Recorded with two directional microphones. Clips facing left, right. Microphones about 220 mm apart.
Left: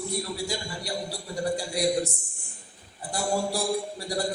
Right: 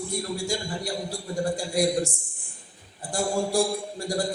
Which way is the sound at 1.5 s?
45° right (ahead or behind).